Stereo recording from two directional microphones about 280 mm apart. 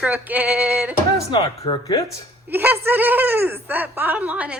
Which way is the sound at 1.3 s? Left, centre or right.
Centre.